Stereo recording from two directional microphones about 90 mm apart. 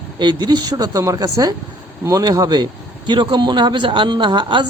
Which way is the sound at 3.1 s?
60° right (ahead or behind).